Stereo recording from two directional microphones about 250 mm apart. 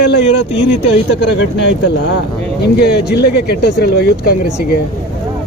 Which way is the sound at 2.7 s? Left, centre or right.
Left.